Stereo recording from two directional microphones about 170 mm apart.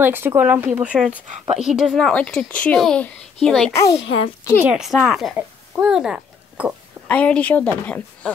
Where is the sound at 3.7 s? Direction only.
20° left (ahead or behind).